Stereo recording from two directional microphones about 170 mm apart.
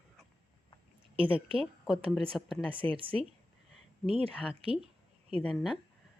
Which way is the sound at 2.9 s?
30° right (ahead or behind).